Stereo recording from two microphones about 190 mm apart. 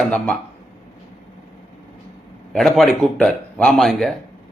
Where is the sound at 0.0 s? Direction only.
5° left (ahead or behind).